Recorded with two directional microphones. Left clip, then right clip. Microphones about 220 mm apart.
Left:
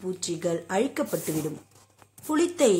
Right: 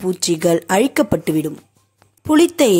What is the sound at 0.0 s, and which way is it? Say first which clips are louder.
A woman's voice: right 12 dB; 40° right (ahead or behind).